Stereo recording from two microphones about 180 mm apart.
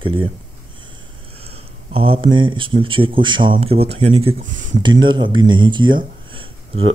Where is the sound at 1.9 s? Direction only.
30° right (ahead or behind).